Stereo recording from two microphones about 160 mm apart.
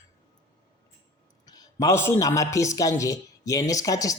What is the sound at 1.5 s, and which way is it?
A man's voice, 20° left (ahead or behind).